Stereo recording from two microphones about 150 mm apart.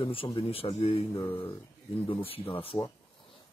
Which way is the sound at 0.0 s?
35° left (ahead or behind).